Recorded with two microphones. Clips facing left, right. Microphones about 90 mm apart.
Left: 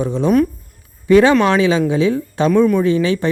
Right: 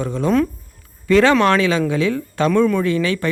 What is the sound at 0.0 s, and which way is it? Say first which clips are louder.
Speech: left 3 dB; 20° left (ahead or behind).